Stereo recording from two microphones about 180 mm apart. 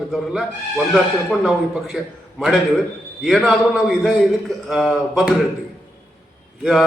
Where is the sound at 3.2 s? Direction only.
Centre (ahead or behind).